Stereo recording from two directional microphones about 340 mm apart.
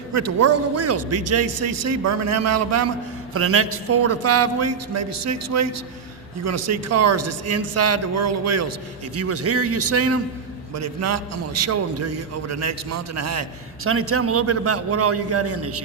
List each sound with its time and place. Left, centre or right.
0.1 s a man's voice: right